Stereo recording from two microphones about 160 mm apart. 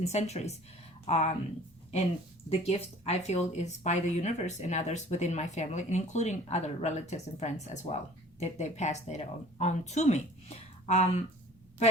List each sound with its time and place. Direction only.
0.0 s speech: 40° left (ahead or behind)
2.5 s speech: 40° left (ahead or behind)